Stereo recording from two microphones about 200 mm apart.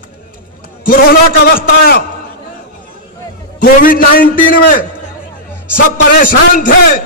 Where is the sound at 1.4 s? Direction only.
45° left (ahead or behind).